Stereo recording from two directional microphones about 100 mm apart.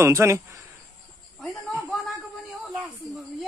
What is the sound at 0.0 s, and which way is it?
Speech, 30° right (ahead or behind).